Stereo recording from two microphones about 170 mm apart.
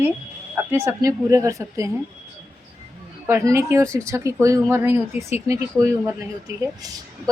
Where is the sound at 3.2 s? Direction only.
15° right (ahead or behind).